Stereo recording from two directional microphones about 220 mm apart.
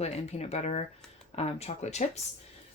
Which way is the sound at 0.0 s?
30° left (ahead or behind).